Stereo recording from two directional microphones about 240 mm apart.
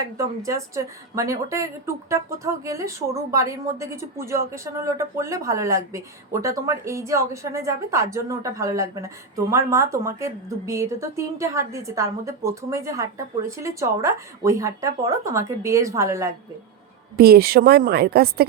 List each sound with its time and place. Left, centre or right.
0.0 s speech: centre
17.2 s speech: right